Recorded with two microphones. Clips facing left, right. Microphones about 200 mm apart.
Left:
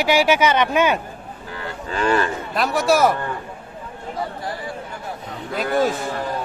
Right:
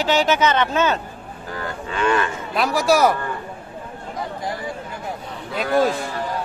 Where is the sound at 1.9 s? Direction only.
35° left (ahead or behind).